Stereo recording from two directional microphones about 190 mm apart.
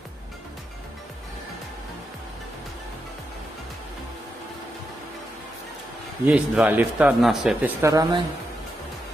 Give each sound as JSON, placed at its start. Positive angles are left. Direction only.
{"t": 6.2, "sound": "a man's voice", "side_deg": -5}
{"t": 7.8, "sound": "speech", "side_deg": -20}